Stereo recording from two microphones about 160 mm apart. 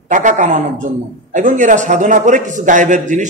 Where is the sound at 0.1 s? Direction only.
50° right (ahead or behind).